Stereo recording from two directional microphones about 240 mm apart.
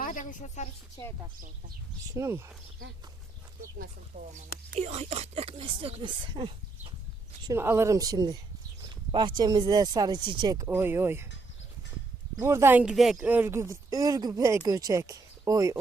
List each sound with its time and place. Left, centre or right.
0.0 s a sound: left
2.1 s speech: centre
4.1 s speech: right; by 11.3 s centre
12.4 s speech: centre